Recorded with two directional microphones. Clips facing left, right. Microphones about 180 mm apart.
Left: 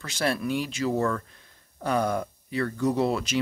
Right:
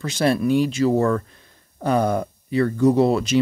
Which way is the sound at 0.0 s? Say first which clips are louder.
Right 8 dB; 20° right (ahead or behind).